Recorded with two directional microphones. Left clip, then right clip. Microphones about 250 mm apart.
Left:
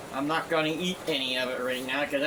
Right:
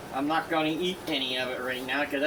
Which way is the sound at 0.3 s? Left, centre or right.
Left.